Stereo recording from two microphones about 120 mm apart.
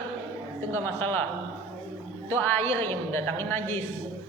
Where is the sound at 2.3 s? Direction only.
20° left (ahead or behind).